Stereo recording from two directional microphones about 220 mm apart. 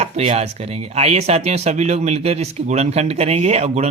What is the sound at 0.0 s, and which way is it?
Speech, 30° right (ahead or behind).